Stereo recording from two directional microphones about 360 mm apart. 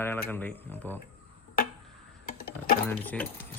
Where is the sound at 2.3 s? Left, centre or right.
Left.